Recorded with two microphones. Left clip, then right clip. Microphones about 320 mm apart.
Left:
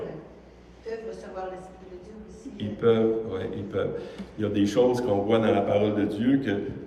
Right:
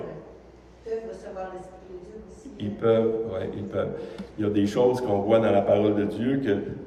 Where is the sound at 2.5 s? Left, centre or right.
Centre.